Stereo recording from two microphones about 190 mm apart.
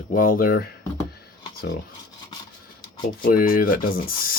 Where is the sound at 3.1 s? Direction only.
45° left (ahead or behind).